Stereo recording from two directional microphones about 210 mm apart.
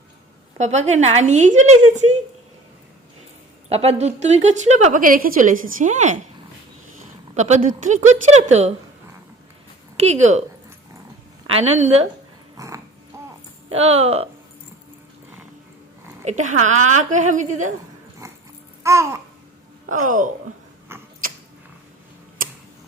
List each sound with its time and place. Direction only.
0.6 s a woman's voice: 35° right (ahead or behind)
3.7 s a woman's voice: 30° right (ahead or behind)
7.3 s a woman's voice: 35° right (ahead or behind)
10.0 s a woman's voice: 35° right (ahead or behind)
11.4 s a woman's voice: 30° right (ahead or behind)
12.5 s dog: 15° right (ahead or behind)
13.1 s a sound: 15° right (ahead or behind)
13.7 s a woman's voice: 30° right (ahead or behind)
16.2 s a woman's voice: 35° right (ahead or behind)
18.2 s dog: 15° right (ahead or behind)
18.8 s babbling: 15° right (ahead or behind)
19.9 s a woman's voice: 40° right (ahead or behind)
20.9 s a sound: 10° right (ahead or behind)